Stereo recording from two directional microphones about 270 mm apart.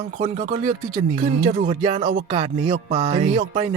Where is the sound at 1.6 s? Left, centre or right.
Right.